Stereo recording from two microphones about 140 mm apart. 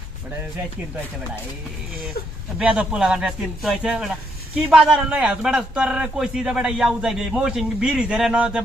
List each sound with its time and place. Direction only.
2.2 s speech: 90° left
2.6 s a man's voice: 5° right (ahead or behind)